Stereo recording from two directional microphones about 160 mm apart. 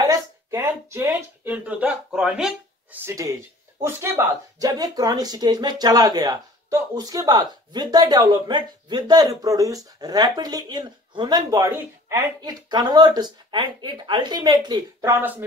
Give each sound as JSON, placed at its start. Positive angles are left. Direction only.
{"t": 0.0, "sound": "a sound", "side_deg": -20}
{"t": 3.1, "sound": "speech", "side_deg": -20}
{"t": 15.0, "sound": "speech", "side_deg": -15}